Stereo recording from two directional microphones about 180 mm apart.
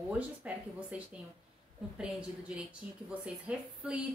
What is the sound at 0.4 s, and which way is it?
A woman's voice, 10° right (ahead or behind).